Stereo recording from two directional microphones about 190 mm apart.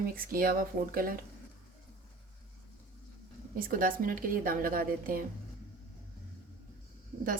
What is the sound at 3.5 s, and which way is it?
Speech, 50° right (ahead or behind).